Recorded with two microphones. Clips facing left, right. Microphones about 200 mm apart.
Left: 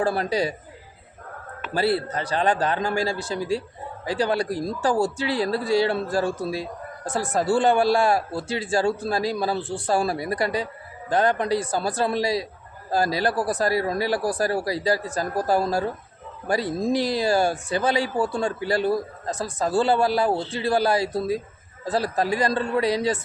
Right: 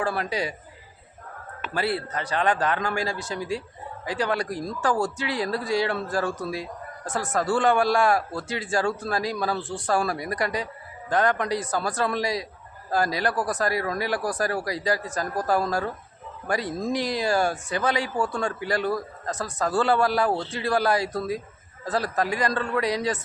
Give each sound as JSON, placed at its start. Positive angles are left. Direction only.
{"t": 0.0, "sound": "speech", "side_deg": 35}
{"t": 1.7, "sound": "a man's voice", "side_deg": 35}